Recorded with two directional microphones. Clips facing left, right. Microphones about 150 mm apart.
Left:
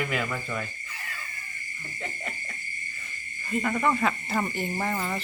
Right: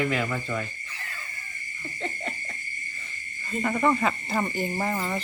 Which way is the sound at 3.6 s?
5° right (ahead or behind).